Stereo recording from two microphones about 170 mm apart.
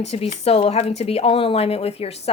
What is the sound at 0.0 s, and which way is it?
Speech, 40° left (ahead or behind).